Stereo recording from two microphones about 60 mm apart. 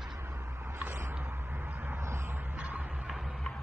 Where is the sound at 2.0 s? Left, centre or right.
Right.